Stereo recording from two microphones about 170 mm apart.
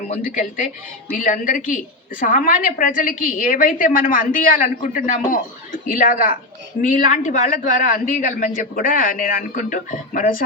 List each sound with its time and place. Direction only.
0.2 s a man's voice: 50° left (ahead or behind)